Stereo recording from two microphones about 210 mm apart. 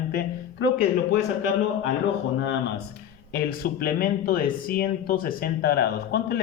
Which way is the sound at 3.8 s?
45° left (ahead or behind).